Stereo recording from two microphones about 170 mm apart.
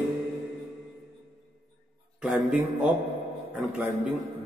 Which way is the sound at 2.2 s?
5° right (ahead or behind).